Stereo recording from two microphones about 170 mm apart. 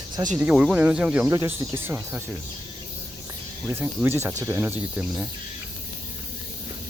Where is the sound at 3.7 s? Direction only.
10° right (ahead or behind).